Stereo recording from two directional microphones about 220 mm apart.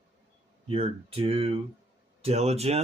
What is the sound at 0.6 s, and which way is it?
Speech, 25° right (ahead or behind).